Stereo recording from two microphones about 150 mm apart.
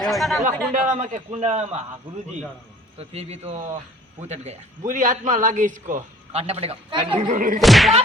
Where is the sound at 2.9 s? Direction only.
45° right (ahead or behind).